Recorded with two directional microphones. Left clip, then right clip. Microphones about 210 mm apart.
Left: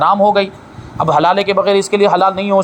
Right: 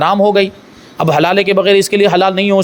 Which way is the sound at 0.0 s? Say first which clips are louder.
Even; 50° right (ahead or behind).